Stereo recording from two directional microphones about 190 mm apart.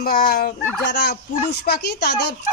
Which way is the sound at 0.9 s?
60° left (ahead or behind).